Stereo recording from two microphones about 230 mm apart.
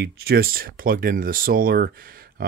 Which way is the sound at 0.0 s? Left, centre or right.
Right.